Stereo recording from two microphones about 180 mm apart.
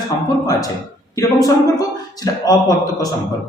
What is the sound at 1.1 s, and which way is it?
Speech, 20° left (ahead or behind).